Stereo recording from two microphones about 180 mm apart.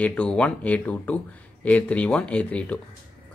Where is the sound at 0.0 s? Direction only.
5° left (ahead or behind).